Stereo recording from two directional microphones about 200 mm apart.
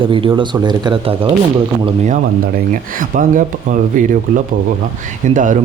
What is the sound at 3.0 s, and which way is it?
Speech, 40° right (ahead or behind).